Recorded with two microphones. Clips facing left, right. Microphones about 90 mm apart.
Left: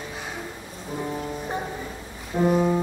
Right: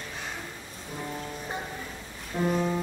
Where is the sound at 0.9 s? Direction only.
20° left (ahead or behind).